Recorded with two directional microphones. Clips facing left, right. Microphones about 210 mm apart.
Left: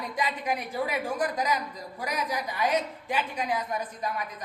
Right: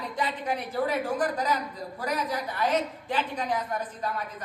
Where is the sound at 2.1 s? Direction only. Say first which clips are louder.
Right 1 dB; 10° left (ahead or behind).